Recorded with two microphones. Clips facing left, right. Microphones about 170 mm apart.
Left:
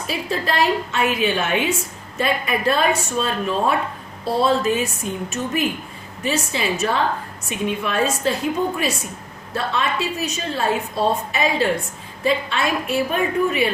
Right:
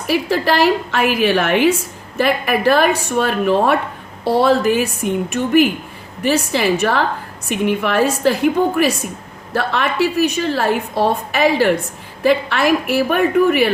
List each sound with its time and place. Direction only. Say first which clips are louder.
0.3 s a woman's voice: right 4 dB; 75° right (ahead or behind)